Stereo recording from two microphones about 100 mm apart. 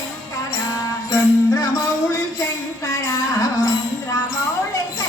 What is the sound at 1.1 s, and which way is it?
Music, 35° left (ahead or behind).